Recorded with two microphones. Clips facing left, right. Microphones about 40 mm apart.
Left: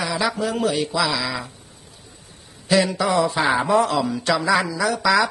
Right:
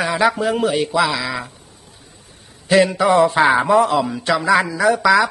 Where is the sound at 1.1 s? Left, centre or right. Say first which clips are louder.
Right 2 dB; right.